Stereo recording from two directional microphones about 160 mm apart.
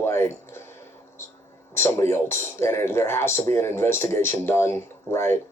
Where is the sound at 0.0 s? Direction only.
15° left (ahead or behind).